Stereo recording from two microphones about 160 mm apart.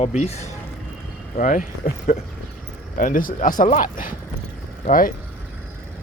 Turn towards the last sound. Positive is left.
turn(degrees=60)  # may be behind; listen again after turning